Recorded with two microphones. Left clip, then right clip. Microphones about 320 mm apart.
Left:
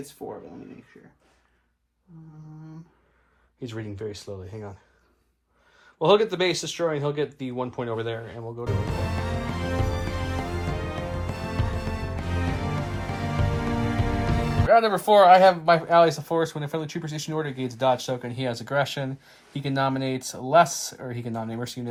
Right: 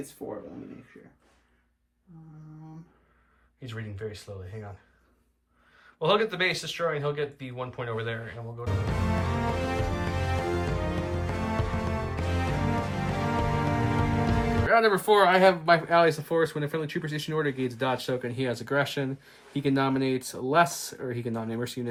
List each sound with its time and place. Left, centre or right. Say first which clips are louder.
0.2 s speech: left 1 dB; left
3.6 s speech: left 4 dB; centre
5.7 s speech: left 5 dB; centre
8.6 s music: left 1 dB; centre
14.7 s speech: left 4 dB; centre